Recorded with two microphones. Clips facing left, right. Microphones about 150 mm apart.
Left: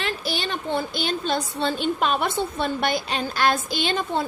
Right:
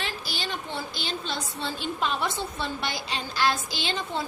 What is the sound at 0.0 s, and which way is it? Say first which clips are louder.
A woman's voice: left 6 dB; 60° left (ahead or behind).